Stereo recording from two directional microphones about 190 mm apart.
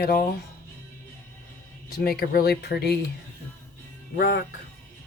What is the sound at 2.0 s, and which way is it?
Speech, 55° left (ahead or behind).